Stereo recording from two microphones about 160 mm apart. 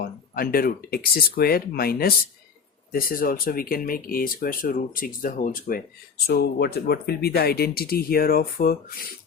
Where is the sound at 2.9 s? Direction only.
60° left (ahead or behind).